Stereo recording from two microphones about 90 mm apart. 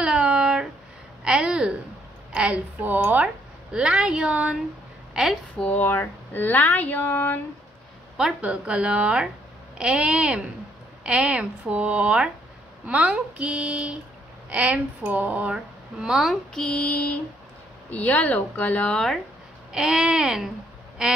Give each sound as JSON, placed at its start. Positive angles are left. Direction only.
{"t": 0.0, "sound": "a sound", "side_deg": -10}
{"t": 2.3, "sound": "speech", "side_deg": -15}
{"t": 5.6, "sound": "speech", "side_deg": 20}
{"t": 8.4, "sound": "speech", "side_deg": -10}
{"t": 16.5, "sound": "a woman's voice", "side_deg": 15}
{"t": 19.7, "sound": "speech", "side_deg": -10}